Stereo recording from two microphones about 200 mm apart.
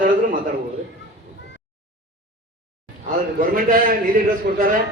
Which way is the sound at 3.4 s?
40° right (ahead or behind).